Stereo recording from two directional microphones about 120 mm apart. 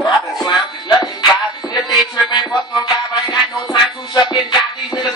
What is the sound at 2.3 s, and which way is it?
Music, 35° left (ahead or behind).